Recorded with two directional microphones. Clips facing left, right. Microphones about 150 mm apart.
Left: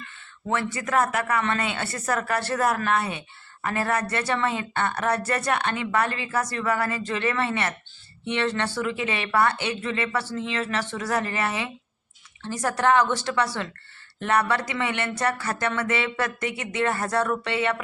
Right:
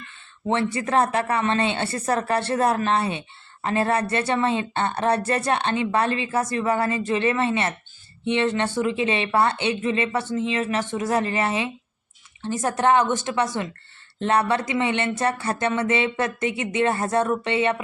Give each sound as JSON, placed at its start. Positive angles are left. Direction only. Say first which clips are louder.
{"t": 0.4, "sound": "speech", "louder": "right 4 dB", "side_deg": -25}